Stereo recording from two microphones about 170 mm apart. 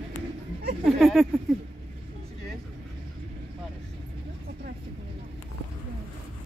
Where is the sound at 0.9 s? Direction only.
Centre (ahead or behind).